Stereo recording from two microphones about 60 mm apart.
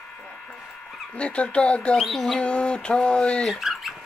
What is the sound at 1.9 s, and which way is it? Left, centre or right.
Speech, centre.